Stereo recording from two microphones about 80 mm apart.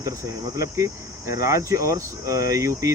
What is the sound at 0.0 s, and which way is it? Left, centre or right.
Speech, right.